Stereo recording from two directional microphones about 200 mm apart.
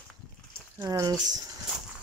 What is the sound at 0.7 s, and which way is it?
Speech, 15° right (ahead or behind).